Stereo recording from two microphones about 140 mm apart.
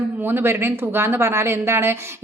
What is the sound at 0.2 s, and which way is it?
A woman's voice, 15° right (ahead or behind).